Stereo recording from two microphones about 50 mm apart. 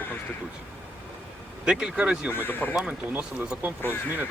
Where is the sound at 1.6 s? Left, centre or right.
Centre.